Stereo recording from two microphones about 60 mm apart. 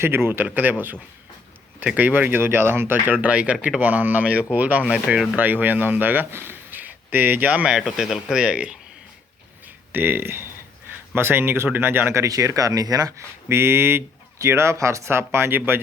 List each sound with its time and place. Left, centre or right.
0.0 s speech: right; by 5.2 s centre
5.4 s a man's voice: right
7.6 s speech: centre
9.9 s speech: right
12.2 s speech: right
13.5 s speech: right